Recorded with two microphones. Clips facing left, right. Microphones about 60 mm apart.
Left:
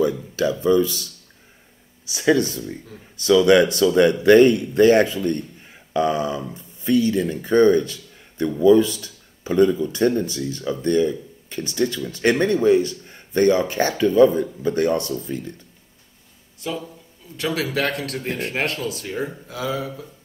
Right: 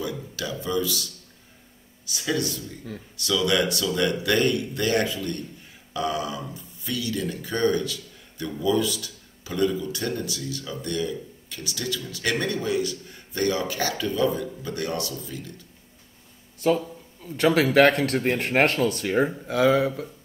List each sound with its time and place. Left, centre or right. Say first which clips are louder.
0.0 s a man's voice: left 11 dB; left
2.1 s a man's voice: left 9 dB; left
17.2 s a man's voice: right 4 dB; right
18.9 s speech: right 4 dB; right